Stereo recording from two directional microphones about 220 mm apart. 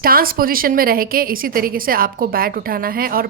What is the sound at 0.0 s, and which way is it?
A woman's voice, 40° right (ahead or behind).